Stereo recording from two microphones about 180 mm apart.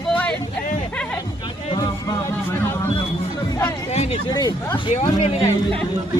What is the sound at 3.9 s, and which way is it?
Speech, 35° left (ahead or behind).